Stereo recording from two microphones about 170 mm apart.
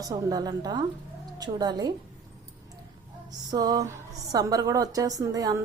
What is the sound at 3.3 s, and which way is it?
Music, 25° right (ahead or behind).